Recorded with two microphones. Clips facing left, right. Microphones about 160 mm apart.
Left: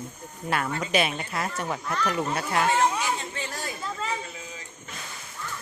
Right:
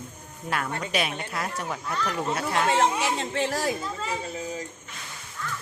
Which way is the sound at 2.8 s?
85° right.